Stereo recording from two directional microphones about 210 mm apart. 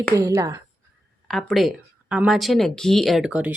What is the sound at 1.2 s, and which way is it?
Speech, centre (ahead or behind).